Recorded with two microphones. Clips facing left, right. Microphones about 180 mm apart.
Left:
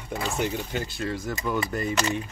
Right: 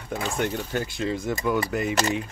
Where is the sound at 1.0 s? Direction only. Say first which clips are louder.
Right 5 dB; 20° right (ahead or behind).